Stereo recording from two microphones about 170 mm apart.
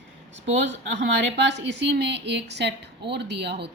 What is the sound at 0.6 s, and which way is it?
A woman's voice, 90° right.